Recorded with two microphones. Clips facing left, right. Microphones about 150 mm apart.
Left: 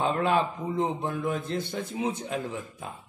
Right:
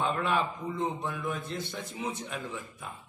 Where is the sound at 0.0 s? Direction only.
35° left (ahead or behind).